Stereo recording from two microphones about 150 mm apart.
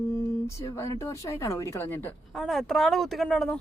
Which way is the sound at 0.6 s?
20° left (ahead or behind).